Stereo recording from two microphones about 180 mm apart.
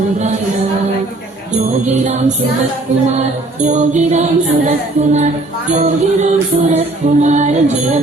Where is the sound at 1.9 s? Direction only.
40° right (ahead or behind).